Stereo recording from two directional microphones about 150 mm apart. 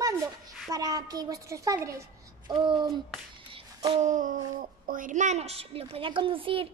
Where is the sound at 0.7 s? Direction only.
25° right (ahead or behind).